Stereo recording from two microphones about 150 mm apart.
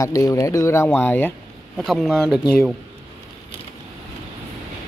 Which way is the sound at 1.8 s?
Centre (ahead or behind).